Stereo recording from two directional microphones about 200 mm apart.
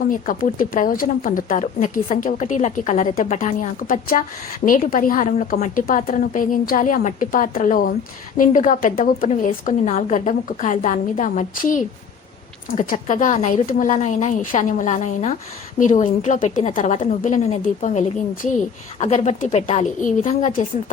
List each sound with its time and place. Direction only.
0.0 s a woman's voice: 45° left (ahead or behind)